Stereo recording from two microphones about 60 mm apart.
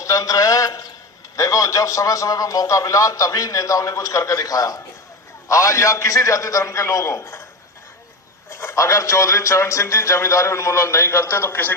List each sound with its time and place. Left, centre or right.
0.0 s a sound: left
1.4 s a man's voice: left
5.5 s a man's voice: left
8.4 s a man's voice: left